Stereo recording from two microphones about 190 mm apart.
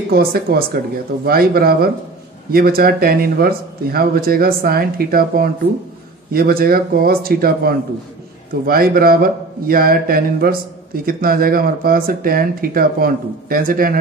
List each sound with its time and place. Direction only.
0.1 s a man's voice: 55° right (ahead or behind)